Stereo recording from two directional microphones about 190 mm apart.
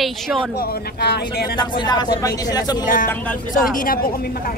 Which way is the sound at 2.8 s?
45° left (ahead or behind).